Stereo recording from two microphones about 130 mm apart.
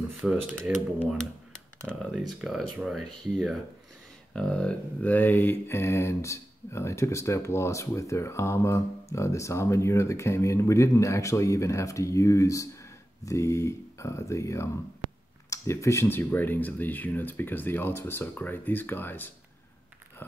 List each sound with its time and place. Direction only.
0.2 s speech: centre (ahead or behind)
4.3 s mantra: 5° left (ahead or behind); by 14.7 s 25° left (ahead or behind)
15.5 s speech: 20° left (ahead or behind)